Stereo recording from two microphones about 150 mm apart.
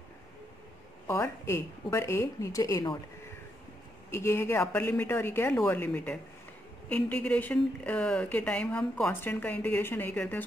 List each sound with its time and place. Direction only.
1.0 s speech: 15° left (ahead or behind)
4.1 s speech: 20° left (ahead or behind)